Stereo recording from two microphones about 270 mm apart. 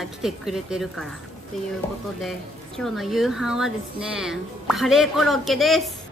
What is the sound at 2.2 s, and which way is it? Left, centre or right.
Speech, centre.